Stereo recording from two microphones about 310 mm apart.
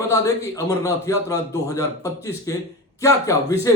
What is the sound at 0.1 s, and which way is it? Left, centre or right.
A man's voice, centre.